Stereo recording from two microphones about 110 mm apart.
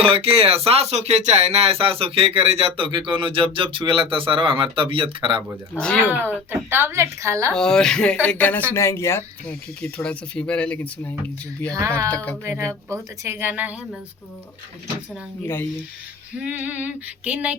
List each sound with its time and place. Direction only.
0.0 s speech: 60° right (ahead or behind)
5.7 s female singing: 15° right (ahead or behind)
6.5 s speech: 20° right (ahead or behind)
7.5 s speech: 5° left (ahead or behind)
8.7 s speech: 25° left (ahead or behind)
10.0 s speech: 10° left (ahead or behind)
11.7 s speech: 30° right (ahead or behind)
12.0 s speech: 15° left (ahead or behind)
12.5 s speech: 25° right (ahead or behind)
16.4 s female singing: 10° right (ahead or behind)